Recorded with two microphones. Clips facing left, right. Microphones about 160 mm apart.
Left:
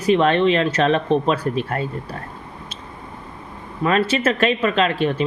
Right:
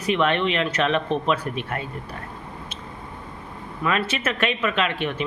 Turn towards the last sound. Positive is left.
turn(degrees=35)  # may be behind; listen again after turning